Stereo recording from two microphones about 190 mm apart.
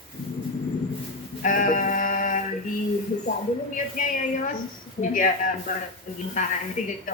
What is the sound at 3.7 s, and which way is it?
A woman's voice, 45° left (ahead or behind).